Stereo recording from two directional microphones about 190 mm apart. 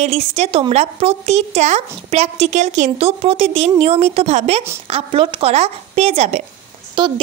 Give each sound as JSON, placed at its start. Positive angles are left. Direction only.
{"t": 0.0, "sound": "a woman's voice", "side_deg": -35}